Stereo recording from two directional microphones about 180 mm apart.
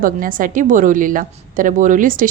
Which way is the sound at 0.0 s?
50° right (ahead or behind).